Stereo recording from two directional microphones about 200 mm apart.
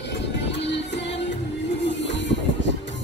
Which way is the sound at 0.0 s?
60° left (ahead or behind).